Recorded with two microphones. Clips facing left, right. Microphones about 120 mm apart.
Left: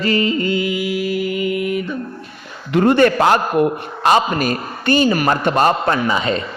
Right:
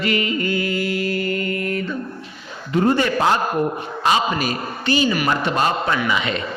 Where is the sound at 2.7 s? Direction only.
70° left (ahead or behind).